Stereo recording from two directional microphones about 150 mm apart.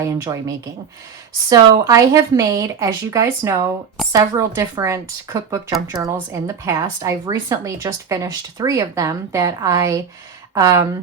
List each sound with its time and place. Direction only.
0.0 s a woman's voice: 20° right (ahead or behind)